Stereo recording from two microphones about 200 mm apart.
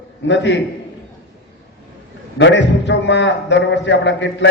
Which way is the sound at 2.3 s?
65° left (ahead or behind).